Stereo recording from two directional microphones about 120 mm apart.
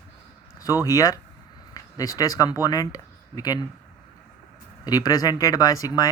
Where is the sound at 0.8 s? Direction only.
25° left (ahead or behind).